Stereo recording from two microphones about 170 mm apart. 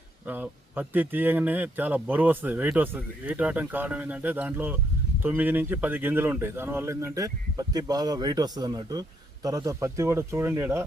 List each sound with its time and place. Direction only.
0.3 s a man's voice: 10° right (ahead or behind)